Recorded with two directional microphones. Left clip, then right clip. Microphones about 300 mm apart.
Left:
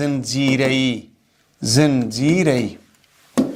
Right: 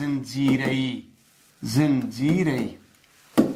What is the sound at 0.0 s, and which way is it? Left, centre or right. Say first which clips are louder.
Speech: left 6 dB; left.